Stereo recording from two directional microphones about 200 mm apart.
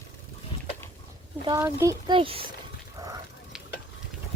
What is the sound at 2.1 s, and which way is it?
Speech, 30° right (ahead or behind).